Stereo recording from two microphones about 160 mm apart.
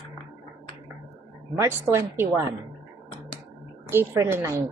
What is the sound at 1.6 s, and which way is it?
Speech, 15° right (ahead or behind).